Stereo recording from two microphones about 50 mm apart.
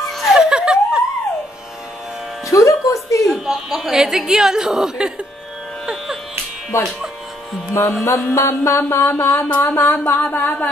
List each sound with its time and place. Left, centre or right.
0.0 s laughter: centre
0.3 s laughter: centre
2.4 s speech: left
3.4 s a woman's voice: centre
6.7 s mantra: left
8.0 s mantra: left
8.4 s speech: left
8.7 s a sound: left
9.6 s a sound: left